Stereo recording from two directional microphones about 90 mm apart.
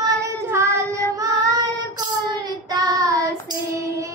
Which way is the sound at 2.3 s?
45° right (ahead or behind).